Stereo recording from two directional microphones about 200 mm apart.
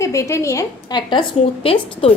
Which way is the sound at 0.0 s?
15° left (ahead or behind).